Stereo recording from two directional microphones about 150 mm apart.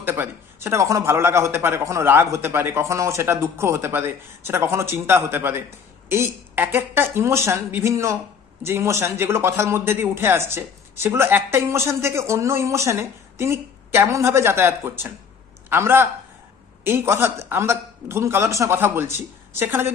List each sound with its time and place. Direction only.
0.0 s speech: 15° right (ahead or behind)